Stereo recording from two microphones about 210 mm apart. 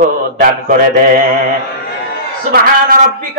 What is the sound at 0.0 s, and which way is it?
Mantra, 45° right (ahead or behind).